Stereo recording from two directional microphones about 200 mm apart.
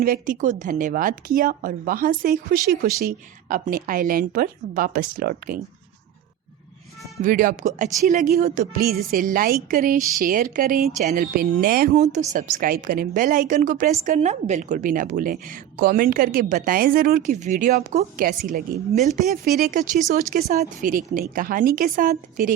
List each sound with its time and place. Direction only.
0.0 s a woman's voice: 45° right (ahead or behind)
7.2 s a woman's voice: 40° right (ahead or behind)